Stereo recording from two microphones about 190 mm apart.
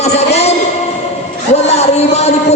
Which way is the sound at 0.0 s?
35° left (ahead or behind).